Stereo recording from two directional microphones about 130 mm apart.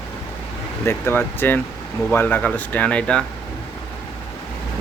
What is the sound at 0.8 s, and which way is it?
Speech, 15° left (ahead or behind).